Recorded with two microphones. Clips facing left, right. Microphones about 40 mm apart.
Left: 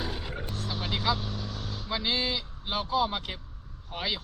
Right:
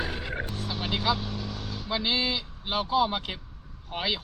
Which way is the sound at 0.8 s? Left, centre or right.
Right.